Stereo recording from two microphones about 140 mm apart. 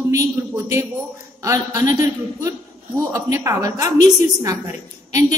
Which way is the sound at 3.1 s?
20° right (ahead or behind).